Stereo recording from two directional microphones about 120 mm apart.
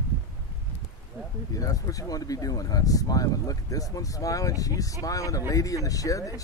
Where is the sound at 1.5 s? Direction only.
30° left (ahead or behind).